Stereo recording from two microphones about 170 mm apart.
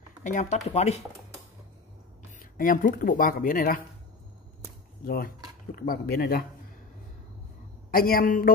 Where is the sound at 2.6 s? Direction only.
55° left (ahead or behind).